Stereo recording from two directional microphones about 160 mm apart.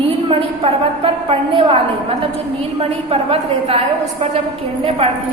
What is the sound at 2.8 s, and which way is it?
A woman's voice, 40° right (ahead or behind).